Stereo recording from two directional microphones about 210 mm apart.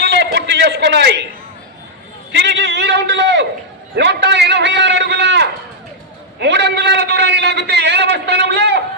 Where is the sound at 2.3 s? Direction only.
55° right (ahead or behind).